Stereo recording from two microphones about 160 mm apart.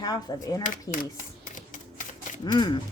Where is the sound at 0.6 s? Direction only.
55° left (ahead or behind).